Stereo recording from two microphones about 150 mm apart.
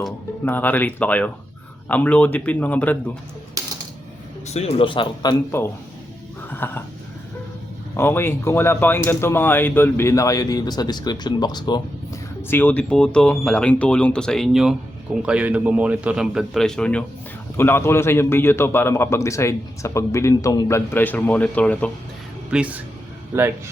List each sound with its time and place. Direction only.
0.4 s a man's voice: 10° left (ahead or behind)
4.4 s speech: 45° left (ahead or behind)
6.5 s a man's voice: 15° left (ahead or behind)
7.9 s a man's voice: 15° left (ahead or behind)
12.4 s a man's voice: 15° left (ahead or behind)
22.5 s speech: 10° right (ahead or behind)